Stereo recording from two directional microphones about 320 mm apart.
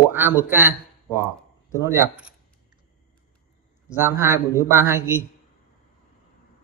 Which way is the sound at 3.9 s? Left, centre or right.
Centre.